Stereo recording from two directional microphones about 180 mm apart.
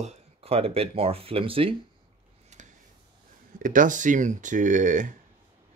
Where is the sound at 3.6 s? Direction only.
45° right (ahead or behind).